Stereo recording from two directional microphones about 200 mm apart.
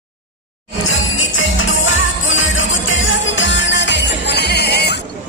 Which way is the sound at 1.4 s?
75° left (ahead or behind).